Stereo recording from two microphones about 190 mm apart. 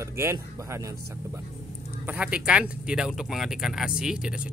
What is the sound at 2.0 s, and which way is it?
Speech, 5° right (ahead or behind).